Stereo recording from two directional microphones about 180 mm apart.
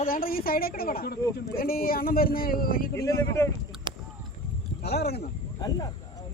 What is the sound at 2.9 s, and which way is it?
Speech, 15° left (ahead or behind).